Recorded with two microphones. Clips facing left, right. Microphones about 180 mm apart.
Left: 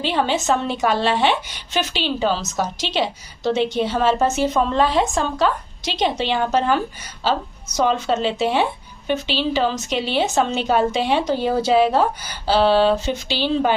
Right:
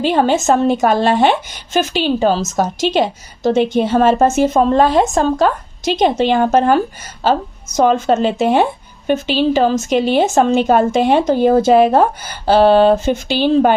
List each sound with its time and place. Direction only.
0.0 s a woman's voice: 45° right (ahead or behind)